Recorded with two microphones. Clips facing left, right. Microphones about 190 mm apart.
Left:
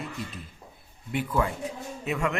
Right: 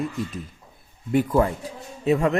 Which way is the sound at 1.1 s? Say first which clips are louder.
Right 7 dB; 40° right (ahead or behind).